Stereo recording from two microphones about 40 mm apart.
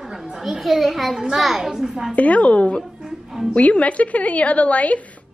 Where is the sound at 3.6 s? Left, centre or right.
Left.